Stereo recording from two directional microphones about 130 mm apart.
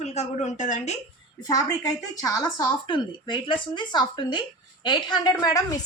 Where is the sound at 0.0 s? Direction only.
60° left (ahead or behind).